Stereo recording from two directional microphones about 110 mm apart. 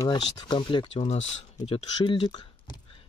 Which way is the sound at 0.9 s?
75° left (ahead or behind).